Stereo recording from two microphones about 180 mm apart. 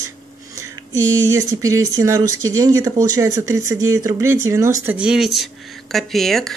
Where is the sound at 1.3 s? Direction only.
20° right (ahead or behind).